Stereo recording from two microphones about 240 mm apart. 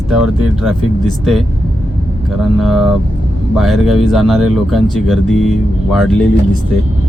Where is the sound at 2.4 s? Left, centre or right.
Centre.